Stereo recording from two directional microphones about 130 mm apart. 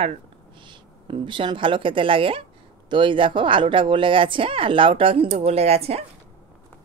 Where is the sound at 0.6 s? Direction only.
40° right (ahead or behind).